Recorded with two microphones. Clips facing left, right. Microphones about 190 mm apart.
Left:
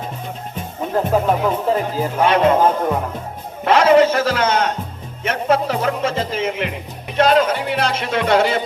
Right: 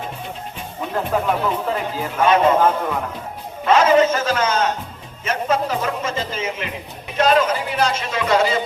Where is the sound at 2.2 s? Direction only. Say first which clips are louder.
Even; 70° left (ahead or behind).